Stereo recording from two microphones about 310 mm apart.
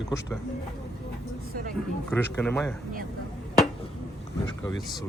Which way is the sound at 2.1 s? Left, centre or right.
Centre.